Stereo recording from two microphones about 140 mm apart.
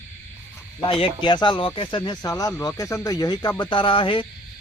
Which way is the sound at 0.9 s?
35° left (ahead or behind).